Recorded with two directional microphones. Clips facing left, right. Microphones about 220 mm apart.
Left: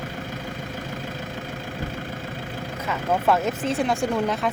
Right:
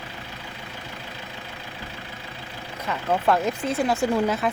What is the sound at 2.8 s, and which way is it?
Speech, centre (ahead or behind).